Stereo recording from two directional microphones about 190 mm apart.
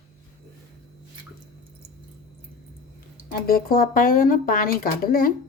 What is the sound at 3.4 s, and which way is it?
A woman's voice, 50° left (ahead or behind).